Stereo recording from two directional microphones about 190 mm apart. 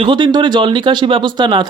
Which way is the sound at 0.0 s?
25° right (ahead or behind).